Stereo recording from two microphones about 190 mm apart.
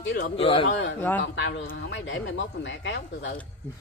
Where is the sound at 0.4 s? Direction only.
30° left (ahead or behind).